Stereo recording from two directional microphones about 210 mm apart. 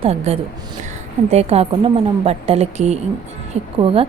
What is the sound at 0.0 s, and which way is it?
A woman's voice, 30° right (ahead or behind).